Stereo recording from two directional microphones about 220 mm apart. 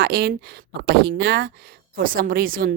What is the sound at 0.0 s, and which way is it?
A woman's voice, 45° right (ahead or behind).